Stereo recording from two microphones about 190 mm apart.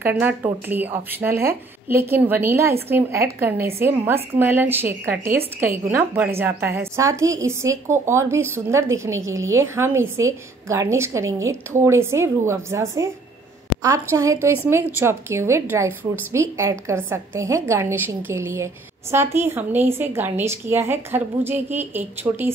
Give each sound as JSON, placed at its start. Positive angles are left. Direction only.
{"t": 0.0, "sound": "a woman's voice", "side_deg": -5}